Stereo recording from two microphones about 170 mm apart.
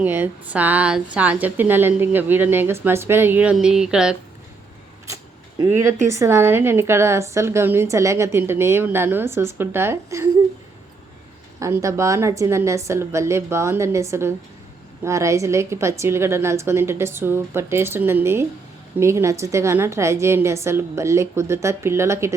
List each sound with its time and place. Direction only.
0.0 s a woman's voice: 10° right (ahead or behind)
5.0 s a sound: 20° right (ahead or behind)
6.1 s a woman's voice: 15° right (ahead or behind)
11.6 s a woman's voice: 20° right (ahead or behind)